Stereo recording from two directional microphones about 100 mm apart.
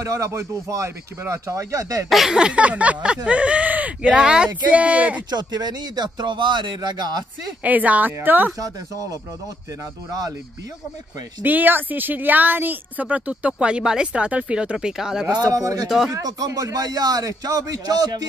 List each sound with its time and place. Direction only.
0.0 s a man's voice: 30° right (ahead or behind)
2.0 s a woman's voice: centre (ahead or behind)
5.3 s speech: 45° right (ahead or behind)
7.6 s a woman's voice: 15° right (ahead or behind)
8.5 s a man's voice: 35° right (ahead or behind)
11.4 s a woman's voice: 20° right (ahead or behind)
15.5 s a man's voice: 35° right (ahead or behind)